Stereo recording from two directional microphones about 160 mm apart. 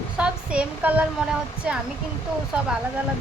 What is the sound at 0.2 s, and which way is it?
A woman's voice, 5° right (ahead or behind).